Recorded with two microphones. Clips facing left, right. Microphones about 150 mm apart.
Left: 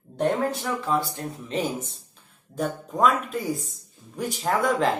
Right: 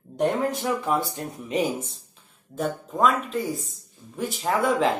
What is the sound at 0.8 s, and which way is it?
Speech, 20° right (ahead or behind).